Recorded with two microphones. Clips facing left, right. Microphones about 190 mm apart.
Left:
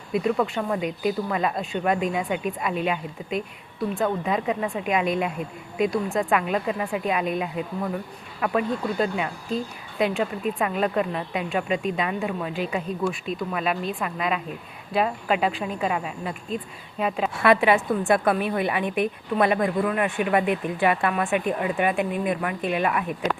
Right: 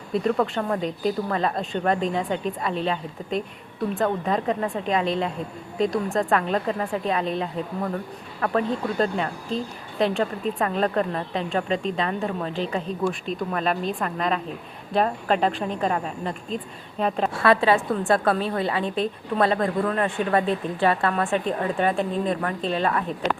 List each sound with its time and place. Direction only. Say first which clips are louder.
0.1 s a woman's voice: right 1 dB; 10° left (ahead or behind)
17.4 s a woman's voice: left 1 dB; 15° left (ahead or behind)